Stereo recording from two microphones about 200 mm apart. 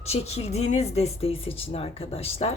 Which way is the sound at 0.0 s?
30° left (ahead or behind).